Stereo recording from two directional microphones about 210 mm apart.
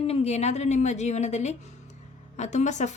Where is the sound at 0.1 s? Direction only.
30° left (ahead or behind).